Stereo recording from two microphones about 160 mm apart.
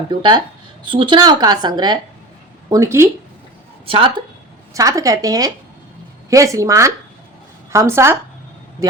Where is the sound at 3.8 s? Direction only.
35° right (ahead or behind).